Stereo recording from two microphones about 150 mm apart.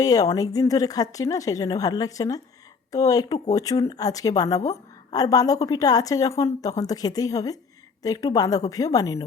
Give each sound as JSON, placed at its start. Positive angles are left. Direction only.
{"t": 0.0, "sound": "a woman's voice", "side_deg": 25}